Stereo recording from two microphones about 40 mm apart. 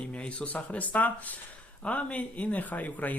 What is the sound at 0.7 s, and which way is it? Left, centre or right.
Speech, left.